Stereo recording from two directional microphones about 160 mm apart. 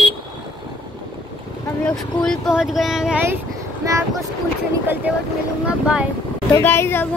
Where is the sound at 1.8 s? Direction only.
5° left (ahead or behind).